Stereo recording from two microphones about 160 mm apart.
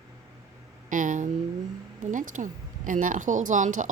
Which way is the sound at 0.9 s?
55° right (ahead or behind).